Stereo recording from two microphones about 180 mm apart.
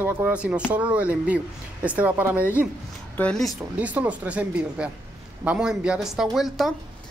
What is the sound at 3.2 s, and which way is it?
Speech, 5° left (ahead or behind).